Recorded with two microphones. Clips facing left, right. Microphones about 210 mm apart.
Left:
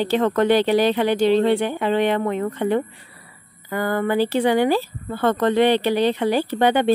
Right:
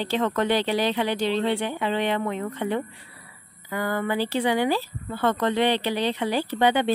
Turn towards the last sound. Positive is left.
turn(degrees=50)  # may be behind; listen again after turning